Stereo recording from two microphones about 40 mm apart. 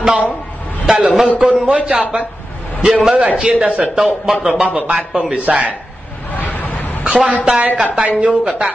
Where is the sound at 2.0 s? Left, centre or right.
Right.